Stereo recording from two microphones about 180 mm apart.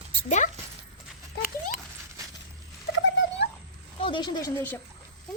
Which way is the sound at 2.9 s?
90° left.